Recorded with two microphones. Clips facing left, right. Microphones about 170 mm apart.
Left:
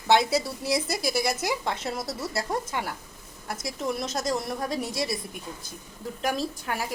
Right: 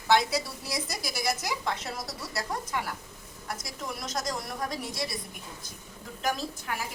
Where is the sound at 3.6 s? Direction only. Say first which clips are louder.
Left 12 dB; 25° left (ahead or behind).